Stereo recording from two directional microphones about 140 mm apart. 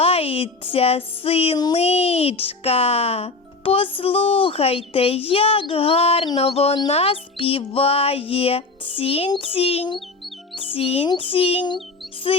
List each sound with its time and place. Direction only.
0.0 s speech: 45° left (ahead or behind)